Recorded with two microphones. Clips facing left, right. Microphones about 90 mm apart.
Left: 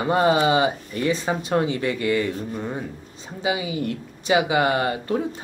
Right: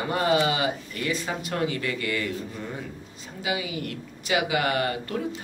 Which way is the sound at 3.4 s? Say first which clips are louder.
Left 5 dB; 25° left (ahead or behind).